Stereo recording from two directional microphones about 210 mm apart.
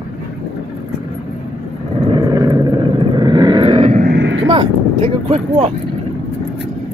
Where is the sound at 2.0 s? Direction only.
20° right (ahead or behind).